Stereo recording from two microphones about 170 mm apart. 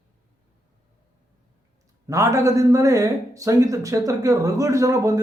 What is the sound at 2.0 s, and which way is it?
Speech, 20° right (ahead or behind).